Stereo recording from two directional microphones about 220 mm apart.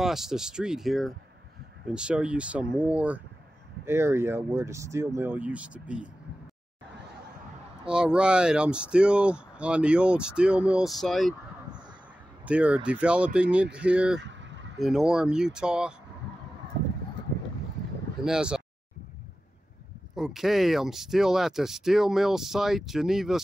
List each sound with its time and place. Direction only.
0.0 s speech: centre (ahead or behind)
7.8 s speech: 5° right (ahead or behind)
12.4 s speech: 5° right (ahead or behind)
14.2 s vehicle: 55° right (ahead or behind)
14.8 s speech: centre (ahead or behind)
18.2 s speech: 5° right (ahead or behind)
20.2 s speech: centre (ahead or behind)